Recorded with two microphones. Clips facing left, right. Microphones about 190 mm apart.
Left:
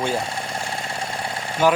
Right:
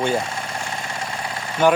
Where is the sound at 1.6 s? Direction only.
Centre (ahead or behind).